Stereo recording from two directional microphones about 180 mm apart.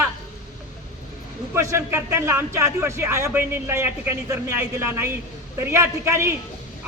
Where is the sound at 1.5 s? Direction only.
15° right (ahead or behind).